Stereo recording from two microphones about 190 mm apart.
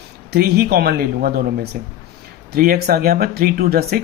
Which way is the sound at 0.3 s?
55° right (ahead or behind).